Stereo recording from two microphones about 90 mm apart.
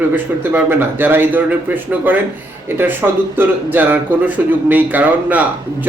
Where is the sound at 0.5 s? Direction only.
20° right (ahead or behind).